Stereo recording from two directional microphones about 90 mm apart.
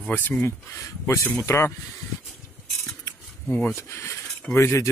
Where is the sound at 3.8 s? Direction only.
30° left (ahead or behind).